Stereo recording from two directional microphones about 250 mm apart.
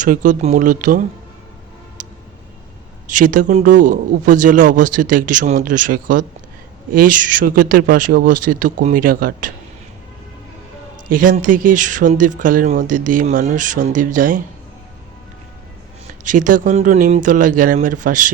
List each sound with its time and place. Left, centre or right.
0.0 s a man's voice: right
3.1 s a man's voice: right
11.2 s a man's voice: right
16.2 s a man's voice: right